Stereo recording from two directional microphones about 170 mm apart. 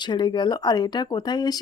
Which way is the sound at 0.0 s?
25° left (ahead or behind).